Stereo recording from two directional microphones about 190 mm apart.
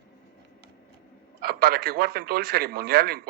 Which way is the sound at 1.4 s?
55° right (ahead or behind).